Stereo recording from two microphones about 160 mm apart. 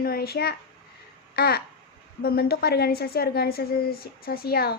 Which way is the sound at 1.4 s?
80° left.